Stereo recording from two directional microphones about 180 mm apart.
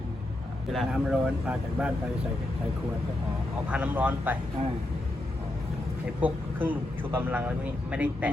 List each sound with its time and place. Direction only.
0.7 s speech: centre (ahead or behind)
3.7 s speech: 10° right (ahead or behind)
6.2 s speech: 10° right (ahead or behind)